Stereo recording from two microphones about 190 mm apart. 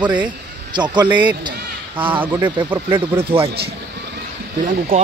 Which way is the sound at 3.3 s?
30° right (ahead or behind).